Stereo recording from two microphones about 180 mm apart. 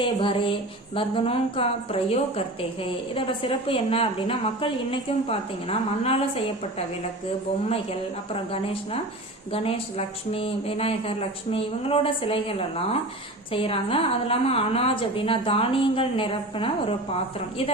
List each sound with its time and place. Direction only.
0.0 s a woman's voice: 30° left (ahead or behind)
8.3 s a woman's voice: 30° left (ahead or behind)